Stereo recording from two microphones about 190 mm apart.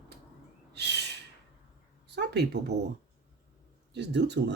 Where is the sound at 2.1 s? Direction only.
60° right (ahead or behind).